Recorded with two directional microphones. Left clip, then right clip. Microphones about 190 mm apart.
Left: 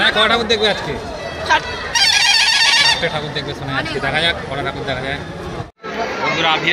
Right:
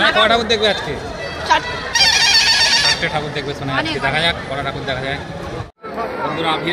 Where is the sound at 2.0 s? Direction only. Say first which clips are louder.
Even; 50° left (ahead or behind).